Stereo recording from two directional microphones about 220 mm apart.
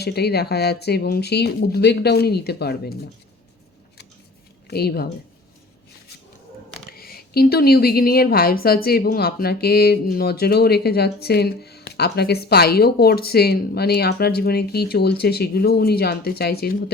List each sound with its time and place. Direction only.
0.0 s a woman's voice: 45° left (ahead or behind)
4.7 s a woman's voice: 45° left (ahead or behind)
6.9 s a woman's voice: 45° left (ahead or behind)